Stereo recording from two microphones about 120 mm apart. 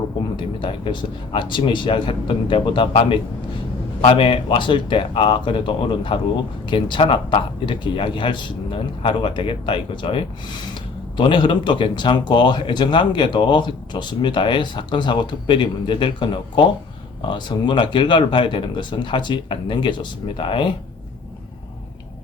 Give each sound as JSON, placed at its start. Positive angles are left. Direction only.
{"t": 0.3, "sound": "speech", "side_deg": 45}
{"t": 4.0, "sound": "speech", "side_deg": 45}